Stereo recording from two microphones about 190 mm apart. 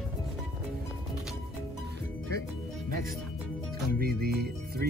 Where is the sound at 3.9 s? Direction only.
55° right (ahead or behind).